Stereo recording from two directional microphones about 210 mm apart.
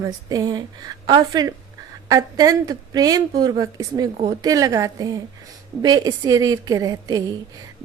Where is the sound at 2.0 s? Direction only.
15° right (ahead or behind).